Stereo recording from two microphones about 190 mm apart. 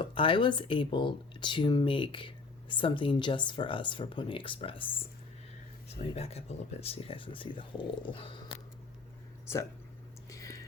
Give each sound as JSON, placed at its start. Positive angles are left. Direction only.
{"t": 0.0, "sound": "speech", "side_deg": 25}
{"t": 6.0, "sound": "speech", "side_deg": 35}
{"t": 10.2, "sound": "a sound", "side_deg": 15}